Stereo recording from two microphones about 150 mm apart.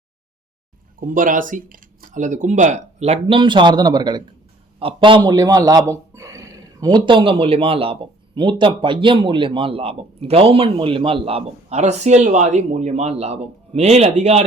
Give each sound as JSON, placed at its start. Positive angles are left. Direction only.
{"t": 0.9, "sound": "a man's voice", "side_deg": -65}